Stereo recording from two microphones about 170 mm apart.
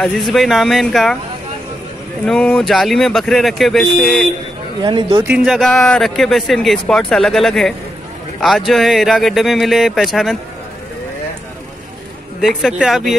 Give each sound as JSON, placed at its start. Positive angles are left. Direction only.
{"t": 0.0, "sound": "speech", "side_deg": 0}
{"t": 2.2, "sound": "speech", "side_deg": 5}
{"t": 4.8, "sound": "speech", "side_deg": -30}
{"t": 5.2, "sound": "speech", "side_deg": -5}
{"t": 12.4, "sound": "speech", "side_deg": 0}